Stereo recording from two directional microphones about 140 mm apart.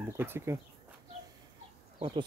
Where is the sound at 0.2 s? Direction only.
15° right (ahead or behind).